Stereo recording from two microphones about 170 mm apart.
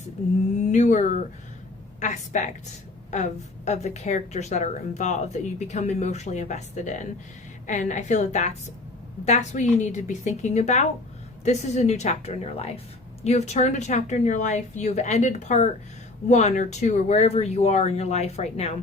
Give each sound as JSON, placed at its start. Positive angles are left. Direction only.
{"t": 0.6, "sound": "a sound", "side_deg": 45}
{"t": 2.0, "sound": "speech", "side_deg": 45}
{"t": 3.7, "sound": "speech", "side_deg": 40}